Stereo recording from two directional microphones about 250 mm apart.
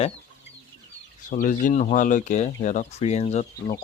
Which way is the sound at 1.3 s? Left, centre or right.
Left.